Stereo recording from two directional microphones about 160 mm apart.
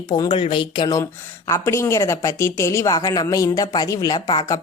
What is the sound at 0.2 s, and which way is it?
Speech, 30° left (ahead or behind).